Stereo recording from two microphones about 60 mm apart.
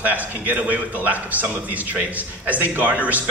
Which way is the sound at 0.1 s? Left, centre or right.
Right.